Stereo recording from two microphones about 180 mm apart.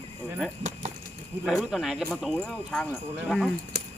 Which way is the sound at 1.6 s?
Centre (ahead or behind).